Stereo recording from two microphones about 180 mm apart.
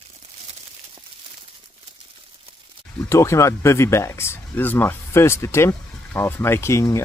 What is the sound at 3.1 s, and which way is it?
Speech, 15° left (ahead or behind).